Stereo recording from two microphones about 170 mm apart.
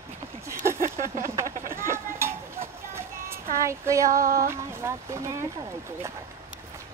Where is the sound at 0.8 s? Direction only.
50° right (ahead or behind).